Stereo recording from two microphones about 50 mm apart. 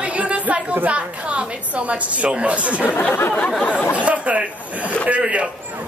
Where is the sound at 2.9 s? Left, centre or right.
Left.